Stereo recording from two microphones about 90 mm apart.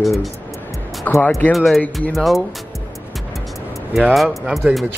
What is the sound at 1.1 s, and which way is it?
Speech, 20° left (ahead or behind).